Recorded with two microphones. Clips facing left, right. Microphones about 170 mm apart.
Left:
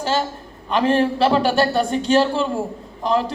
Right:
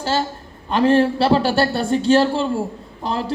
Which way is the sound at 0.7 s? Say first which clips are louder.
Right 2 dB; 35° right (ahead or behind).